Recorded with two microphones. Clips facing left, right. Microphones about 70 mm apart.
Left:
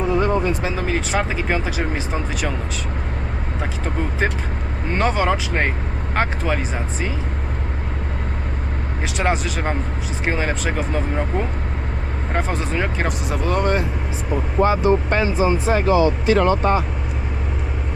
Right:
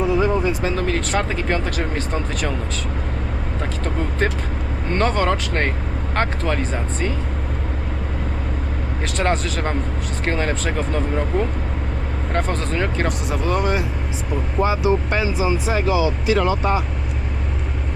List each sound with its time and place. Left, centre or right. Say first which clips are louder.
0.0 s speech: even; centre
4.9 s speech: even; centre
9.1 s speech: even; centre
14.6 s speech: left 2 dB; left